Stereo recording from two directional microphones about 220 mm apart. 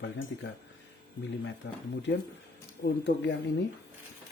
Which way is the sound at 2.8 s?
50° left (ahead or behind).